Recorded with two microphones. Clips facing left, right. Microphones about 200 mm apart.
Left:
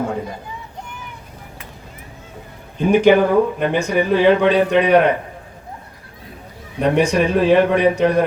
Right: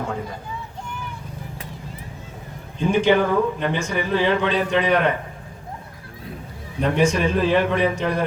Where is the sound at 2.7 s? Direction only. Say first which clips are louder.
Left 5 dB; 60° left (ahead or behind).